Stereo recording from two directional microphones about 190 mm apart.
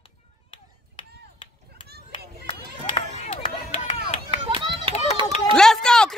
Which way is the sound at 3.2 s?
30° left (ahead or behind).